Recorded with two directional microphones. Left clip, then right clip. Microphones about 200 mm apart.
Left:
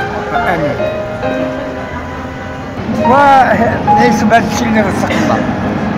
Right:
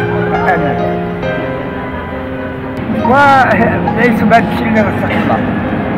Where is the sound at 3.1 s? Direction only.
5° left (ahead or behind).